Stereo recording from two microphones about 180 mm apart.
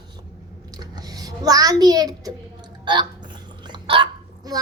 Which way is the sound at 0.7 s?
20° right (ahead or behind).